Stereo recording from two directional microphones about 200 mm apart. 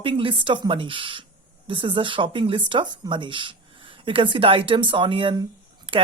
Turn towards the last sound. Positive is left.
turn(degrees=-25)  # may be behind; listen again after turning